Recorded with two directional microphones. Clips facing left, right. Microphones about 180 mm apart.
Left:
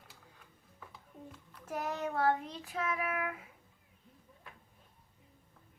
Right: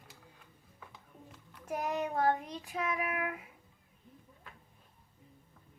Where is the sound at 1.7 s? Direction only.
15° right (ahead or behind).